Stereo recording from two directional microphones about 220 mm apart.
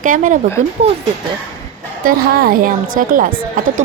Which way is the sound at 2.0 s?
40° right (ahead or behind).